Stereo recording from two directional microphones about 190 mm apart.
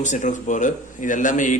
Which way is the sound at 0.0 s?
40° left (ahead or behind).